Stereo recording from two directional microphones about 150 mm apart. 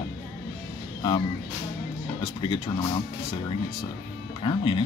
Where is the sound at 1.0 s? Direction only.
30° left (ahead or behind).